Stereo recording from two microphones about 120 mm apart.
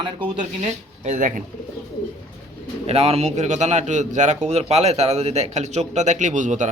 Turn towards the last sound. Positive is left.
turn(degrees=-90)